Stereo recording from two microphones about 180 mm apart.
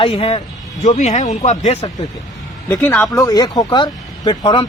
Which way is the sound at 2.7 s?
10° left (ahead or behind).